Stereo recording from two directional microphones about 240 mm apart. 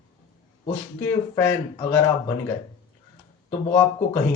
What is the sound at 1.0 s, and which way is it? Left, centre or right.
Speech, centre.